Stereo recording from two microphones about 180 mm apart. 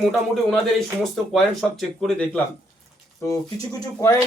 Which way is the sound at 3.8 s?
20° left (ahead or behind).